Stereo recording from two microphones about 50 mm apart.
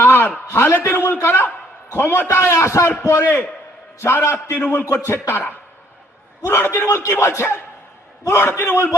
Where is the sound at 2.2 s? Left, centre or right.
Left.